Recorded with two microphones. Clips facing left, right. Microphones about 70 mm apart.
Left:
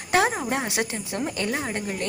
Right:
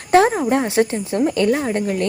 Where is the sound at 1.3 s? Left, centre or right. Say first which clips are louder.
Right 10 dB; right.